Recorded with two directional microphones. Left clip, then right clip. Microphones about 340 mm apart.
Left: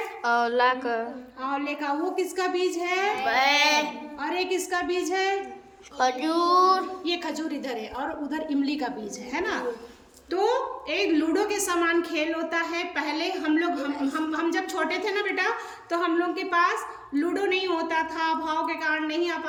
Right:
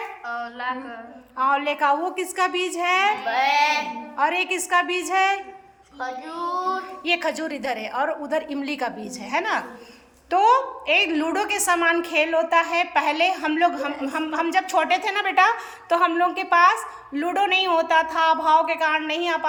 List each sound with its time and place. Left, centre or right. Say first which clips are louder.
0.3 s speech: left 8 dB; centre
1.4 s a woman's voice: right 9 dB; centre
3.2 s speech: right 2 dB; centre
4.2 s a woman's voice: right 6 dB; centre
7.0 s a woman's voice: right 6 dB; centre